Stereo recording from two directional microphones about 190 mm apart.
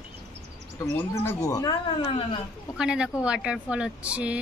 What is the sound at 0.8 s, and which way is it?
Speech, 15° left (ahead or behind).